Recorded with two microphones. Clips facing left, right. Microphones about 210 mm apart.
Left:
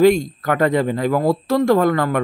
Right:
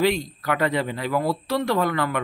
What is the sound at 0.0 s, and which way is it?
Speech, 45° left (ahead or behind).